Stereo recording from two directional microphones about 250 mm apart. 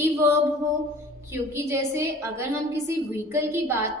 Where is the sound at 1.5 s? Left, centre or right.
Centre.